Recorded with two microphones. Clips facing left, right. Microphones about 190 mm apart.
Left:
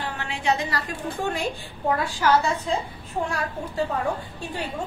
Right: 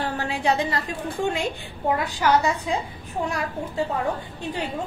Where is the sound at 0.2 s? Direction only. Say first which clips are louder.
Right 1 dB; 35° right (ahead or behind).